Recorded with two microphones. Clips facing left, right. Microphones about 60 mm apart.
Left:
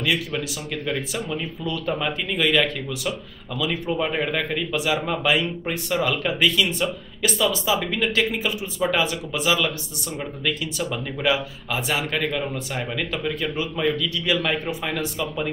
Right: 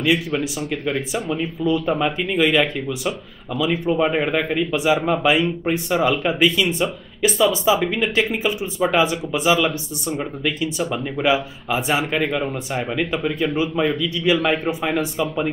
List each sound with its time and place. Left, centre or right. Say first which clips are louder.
0.0 s speech: right 5 dB; centre
3.9 s speech: right 5 dB; centre